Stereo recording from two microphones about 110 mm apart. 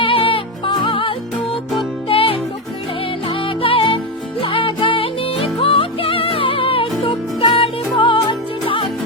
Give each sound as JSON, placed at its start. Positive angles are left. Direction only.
{"t": 0.0, "sound": "music", "side_deg": 55}